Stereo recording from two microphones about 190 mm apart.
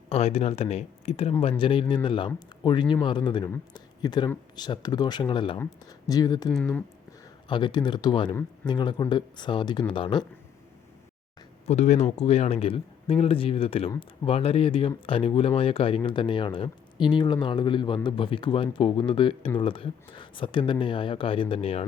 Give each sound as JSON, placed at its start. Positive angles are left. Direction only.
{"t": 0.1, "sound": "speech", "side_deg": 30}
{"t": 6.5, "sound": "speech", "side_deg": 5}
{"t": 7.4, "sound": "speech", "side_deg": 25}
{"t": 11.6, "sound": "speech", "side_deg": 35}